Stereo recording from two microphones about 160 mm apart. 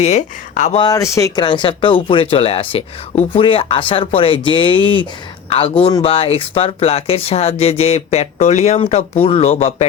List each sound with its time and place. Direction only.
0.0 s speech: 45° left (ahead or behind)
0.8 s speech: 20° left (ahead or behind); by 9.8 s 40° left (ahead or behind)